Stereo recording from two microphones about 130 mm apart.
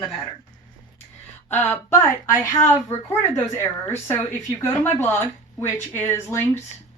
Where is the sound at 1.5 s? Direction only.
20° left (ahead or behind).